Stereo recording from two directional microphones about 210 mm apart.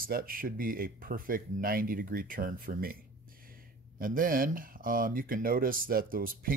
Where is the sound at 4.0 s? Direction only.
40° right (ahead or behind).